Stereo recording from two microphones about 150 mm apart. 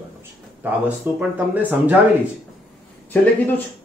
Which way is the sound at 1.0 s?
10° right (ahead or behind).